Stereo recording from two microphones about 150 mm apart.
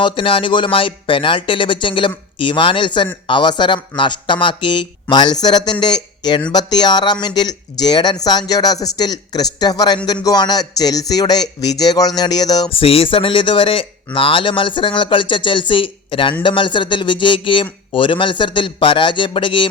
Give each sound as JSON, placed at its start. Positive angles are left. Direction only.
{"t": 0.0, "sound": "speech", "side_deg": 35}
{"t": 12.7, "sound": "speech", "side_deg": 40}